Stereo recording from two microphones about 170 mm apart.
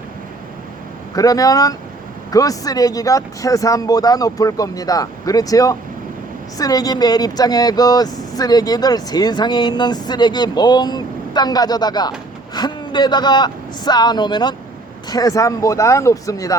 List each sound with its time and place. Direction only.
1.1 s speech: 20° left (ahead or behind)